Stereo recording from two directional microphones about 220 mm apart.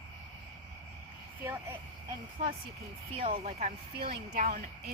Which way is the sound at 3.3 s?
30° right (ahead or behind).